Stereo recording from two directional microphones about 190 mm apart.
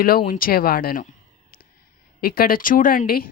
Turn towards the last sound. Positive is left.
turn(degrees=50)  # may be behind; listen again after turning